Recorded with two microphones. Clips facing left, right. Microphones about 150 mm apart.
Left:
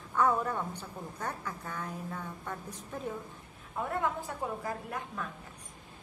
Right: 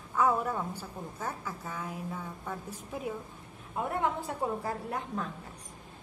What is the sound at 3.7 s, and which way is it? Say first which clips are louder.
A woman's voice: right 2 dB; 25° right (ahead or behind).